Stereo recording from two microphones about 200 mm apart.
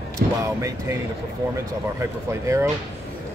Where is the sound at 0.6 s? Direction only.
15° right (ahead or behind).